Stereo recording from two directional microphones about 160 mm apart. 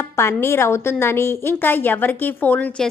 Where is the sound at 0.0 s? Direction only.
15° left (ahead or behind).